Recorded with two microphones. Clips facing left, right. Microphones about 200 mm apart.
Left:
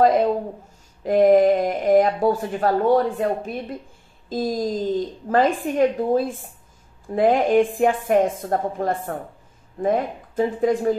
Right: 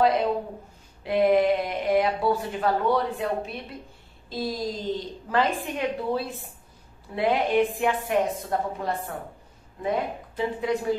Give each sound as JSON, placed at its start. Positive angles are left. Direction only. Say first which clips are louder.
{"t": 0.0, "sound": "speech", "louder": "left 5 dB", "side_deg": 45}